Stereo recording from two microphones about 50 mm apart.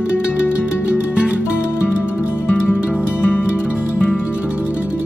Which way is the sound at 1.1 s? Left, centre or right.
Right.